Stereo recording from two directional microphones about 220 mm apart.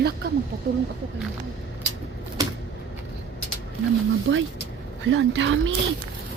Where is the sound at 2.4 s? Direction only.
15° right (ahead or behind).